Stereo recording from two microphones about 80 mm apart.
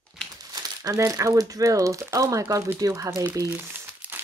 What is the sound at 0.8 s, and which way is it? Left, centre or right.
Speech, right.